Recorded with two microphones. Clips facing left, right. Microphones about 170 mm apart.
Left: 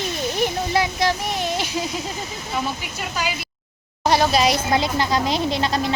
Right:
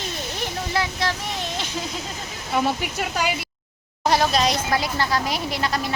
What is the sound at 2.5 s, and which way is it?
Speech, 60° right (ahead or behind).